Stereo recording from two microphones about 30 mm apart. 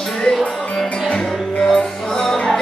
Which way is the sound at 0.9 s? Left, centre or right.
Left.